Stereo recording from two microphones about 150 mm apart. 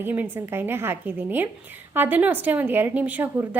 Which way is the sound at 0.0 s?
15° right (ahead or behind).